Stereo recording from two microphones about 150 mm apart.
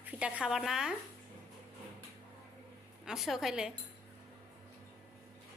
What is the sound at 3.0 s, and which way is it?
Speech, 5° right (ahead or behind).